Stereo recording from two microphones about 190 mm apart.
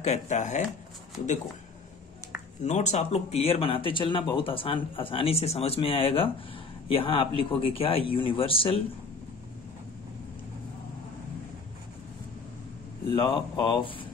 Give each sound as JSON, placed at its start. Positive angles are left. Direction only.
{"t": 0.0, "sound": "speech", "side_deg": 40}
{"t": 2.6, "sound": "speech", "side_deg": 35}
{"t": 13.0, "sound": "speech", "side_deg": 25}